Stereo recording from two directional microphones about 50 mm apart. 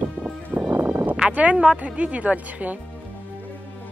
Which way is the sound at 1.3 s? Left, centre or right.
Right.